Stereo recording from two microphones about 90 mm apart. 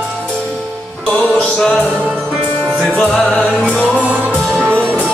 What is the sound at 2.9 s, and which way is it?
Music, 10° left (ahead or behind).